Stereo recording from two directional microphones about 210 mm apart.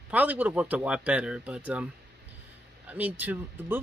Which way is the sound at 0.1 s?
5° right (ahead or behind).